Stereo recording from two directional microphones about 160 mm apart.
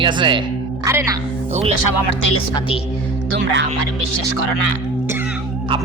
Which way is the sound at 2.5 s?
35° left (ahead or behind).